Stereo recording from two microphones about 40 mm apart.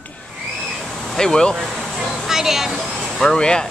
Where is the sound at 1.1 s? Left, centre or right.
Centre.